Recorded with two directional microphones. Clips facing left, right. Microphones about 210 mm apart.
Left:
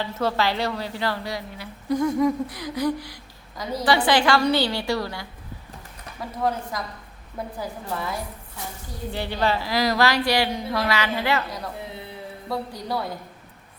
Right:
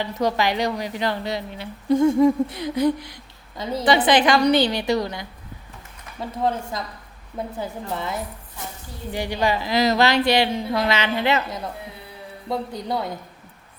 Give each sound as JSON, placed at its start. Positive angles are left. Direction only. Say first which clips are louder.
{"t": 0.0, "sound": "a woman's voice", "louder": "right 2 dB", "side_deg": -15}